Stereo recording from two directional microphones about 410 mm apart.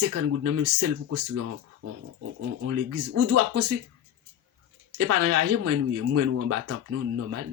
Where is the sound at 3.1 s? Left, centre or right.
Right.